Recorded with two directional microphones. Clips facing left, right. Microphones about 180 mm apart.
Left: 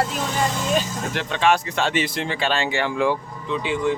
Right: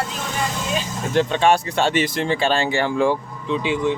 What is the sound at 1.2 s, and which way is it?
Speech, 30° right (ahead or behind).